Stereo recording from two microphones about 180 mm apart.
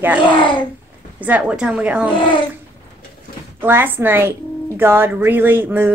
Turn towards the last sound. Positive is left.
turn(degrees=-10)  # may be behind; listen again after turning